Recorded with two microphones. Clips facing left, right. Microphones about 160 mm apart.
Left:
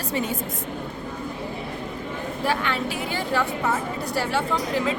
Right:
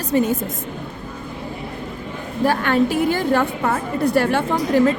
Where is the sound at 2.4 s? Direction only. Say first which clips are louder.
Right 9 dB; 50° right (ahead or behind).